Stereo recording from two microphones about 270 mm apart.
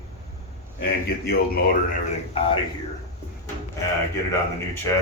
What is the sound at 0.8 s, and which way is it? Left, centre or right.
Speech, left.